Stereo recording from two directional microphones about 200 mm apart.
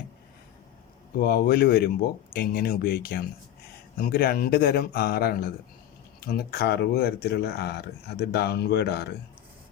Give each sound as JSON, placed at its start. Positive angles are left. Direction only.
{"t": 1.2, "sound": "speech", "side_deg": 50}